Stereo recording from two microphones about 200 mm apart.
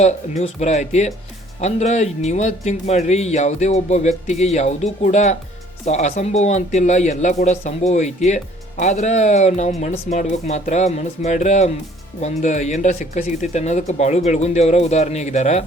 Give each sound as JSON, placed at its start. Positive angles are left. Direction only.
{"t": 0.0, "sound": "speech", "side_deg": 35}